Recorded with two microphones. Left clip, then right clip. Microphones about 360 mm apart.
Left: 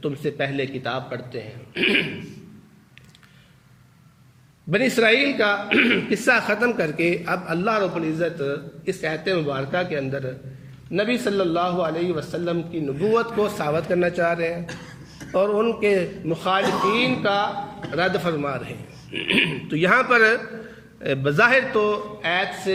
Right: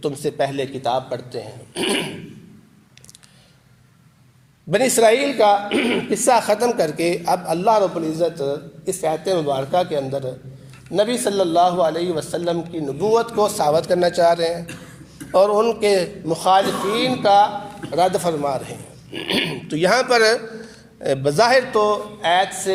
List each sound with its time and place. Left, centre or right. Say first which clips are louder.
0.0 s a man's voice: right 4 dB; right
4.7 s a man's voice: right 3 dB; centre